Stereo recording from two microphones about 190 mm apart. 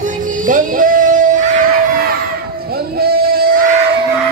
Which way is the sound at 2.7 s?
55° right (ahead or behind).